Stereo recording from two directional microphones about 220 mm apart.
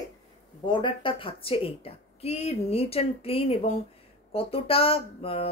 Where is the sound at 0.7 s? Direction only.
20° left (ahead or behind).